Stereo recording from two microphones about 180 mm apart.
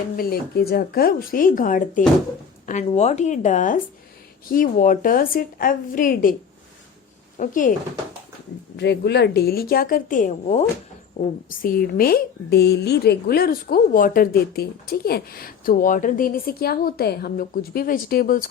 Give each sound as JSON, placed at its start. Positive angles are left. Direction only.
{"t": 0.2, "sound": "a woman's voice", "side_deg": 60}
{"t": 7.3, "sound": "a woman's voice", "side_deg": 45}
{"t": 8.7, "sound": "a woman's voice", "side_deg": 70}
{"t": 11.4, "sound": "a woman's voice", "side_deg": 55}